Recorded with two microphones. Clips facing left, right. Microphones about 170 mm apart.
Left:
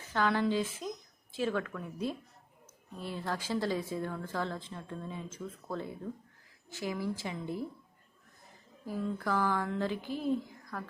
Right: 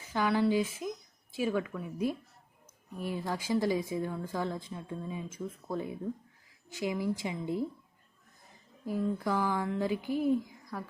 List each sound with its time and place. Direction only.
0.1 s a woman's voice: 10° right (ahead or behind)
8.9 s a woman's voice: 15° right (ahead or behind)